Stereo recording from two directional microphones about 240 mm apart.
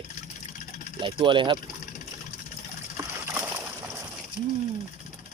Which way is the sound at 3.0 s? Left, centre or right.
Centre.